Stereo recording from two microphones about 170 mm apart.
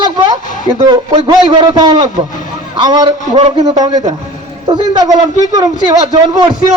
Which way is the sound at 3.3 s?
40° right (ahead or behind).